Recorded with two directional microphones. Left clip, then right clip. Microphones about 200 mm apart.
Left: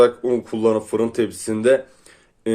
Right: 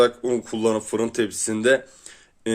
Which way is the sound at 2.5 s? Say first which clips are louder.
Left 3 dB; 20° right (ahead or behind).